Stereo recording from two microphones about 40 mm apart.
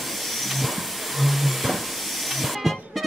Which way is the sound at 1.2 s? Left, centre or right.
Centre.